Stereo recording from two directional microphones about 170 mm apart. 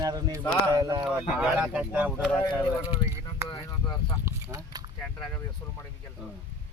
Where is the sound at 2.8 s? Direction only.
20° left (ahead or behind).